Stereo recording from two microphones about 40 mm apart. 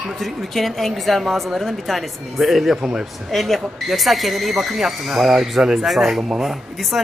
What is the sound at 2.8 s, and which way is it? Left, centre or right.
Speech, centre.